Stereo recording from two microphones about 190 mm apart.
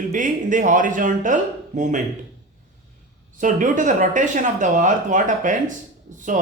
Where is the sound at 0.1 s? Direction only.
45° right (ahead or behind).